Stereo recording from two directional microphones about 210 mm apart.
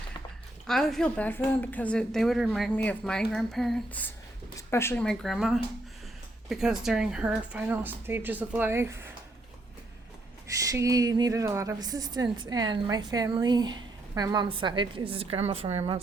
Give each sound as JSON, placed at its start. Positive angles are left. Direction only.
{"t": 0.7, "sound": "a woman's voice", "side_deg": 0}
{"t": 10.4, "sound": "speech", "side_deg": -15}